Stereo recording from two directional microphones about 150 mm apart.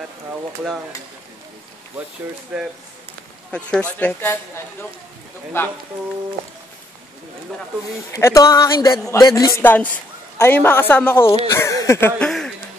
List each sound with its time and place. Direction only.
2.5 s speech: 5° right (ahead or behind)
3.5 s a woman's voice: 5° left (ahead or behind)
5.5 s a woman's voice: 15° left (ahead or behind)
8.1 s a man's voice: 20° left (ahead or behind)
12.2 s a sound: 5° left (ahead or behind)